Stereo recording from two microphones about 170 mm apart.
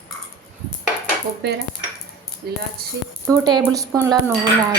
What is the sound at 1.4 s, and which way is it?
Cutlery, 70° right (ahead or behind).